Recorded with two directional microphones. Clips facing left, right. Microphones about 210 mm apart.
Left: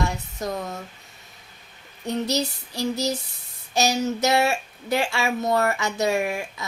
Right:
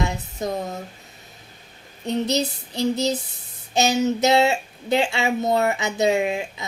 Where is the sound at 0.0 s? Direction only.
20° right (ahead or behind).